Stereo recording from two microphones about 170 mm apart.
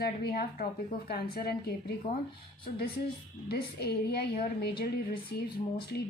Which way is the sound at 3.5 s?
70° left (ahead or behind).